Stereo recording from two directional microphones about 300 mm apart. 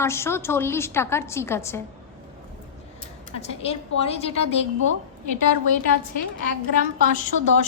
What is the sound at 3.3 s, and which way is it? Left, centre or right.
A woman's voice, centre.